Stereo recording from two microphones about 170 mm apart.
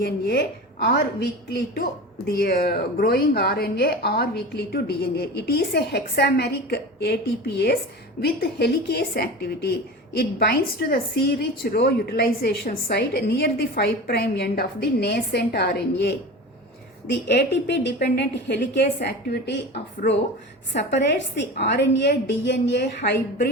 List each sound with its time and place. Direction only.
0.0 s a woman's voice: 75° left (ahead or behind)